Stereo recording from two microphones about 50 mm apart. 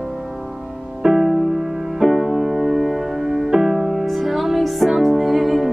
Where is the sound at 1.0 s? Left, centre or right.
Centre.